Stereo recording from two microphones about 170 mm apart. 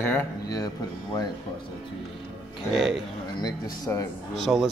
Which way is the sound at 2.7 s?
5° right (ahead or behind).